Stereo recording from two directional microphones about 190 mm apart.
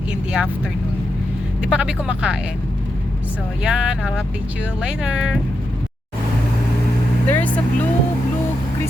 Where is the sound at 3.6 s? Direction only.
5° right (ahead or behind).